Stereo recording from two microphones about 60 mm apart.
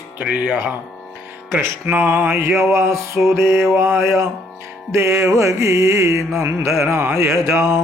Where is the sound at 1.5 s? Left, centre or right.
Right.